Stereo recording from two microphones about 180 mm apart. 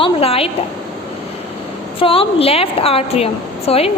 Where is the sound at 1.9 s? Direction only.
30° left (ahead or behind).